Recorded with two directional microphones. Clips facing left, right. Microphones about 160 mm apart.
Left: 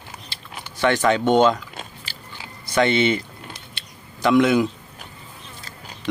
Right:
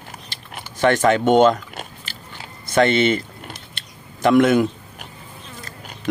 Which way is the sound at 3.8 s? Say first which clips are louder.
Right 3 dB; 50° right (ahead or behind).